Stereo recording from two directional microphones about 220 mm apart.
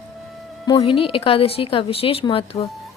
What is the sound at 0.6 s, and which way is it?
Speech, 20° left (ahead or behind).